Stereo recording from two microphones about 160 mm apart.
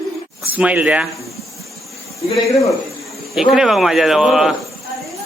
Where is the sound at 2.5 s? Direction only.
20° left (ahead or behind).